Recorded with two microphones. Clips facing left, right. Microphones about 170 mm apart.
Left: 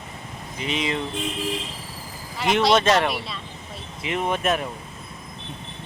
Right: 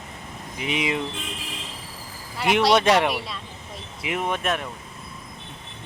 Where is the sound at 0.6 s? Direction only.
10° right (ahead or behind).